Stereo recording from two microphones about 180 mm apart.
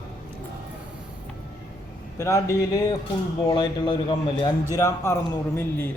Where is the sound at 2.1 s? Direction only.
15° left (ahead or behind).